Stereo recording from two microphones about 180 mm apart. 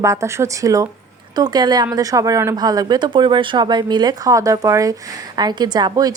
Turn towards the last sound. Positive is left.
turn(degrees=-20)  # may be behind; listen again after turning